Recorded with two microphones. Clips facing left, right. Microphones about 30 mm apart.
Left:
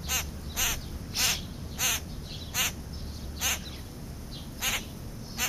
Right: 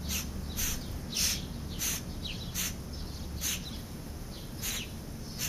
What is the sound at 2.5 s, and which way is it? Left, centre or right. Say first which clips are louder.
Duck: left 11 dB; left.